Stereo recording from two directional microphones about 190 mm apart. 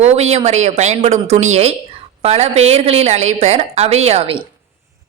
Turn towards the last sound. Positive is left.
turn(degrees=-30)  # may be behind; listen again after turning